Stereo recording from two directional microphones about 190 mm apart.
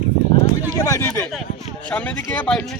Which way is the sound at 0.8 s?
15° left (ahead or behind).